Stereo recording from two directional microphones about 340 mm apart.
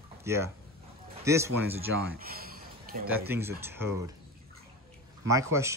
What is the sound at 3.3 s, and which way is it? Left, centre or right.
Speech, centre.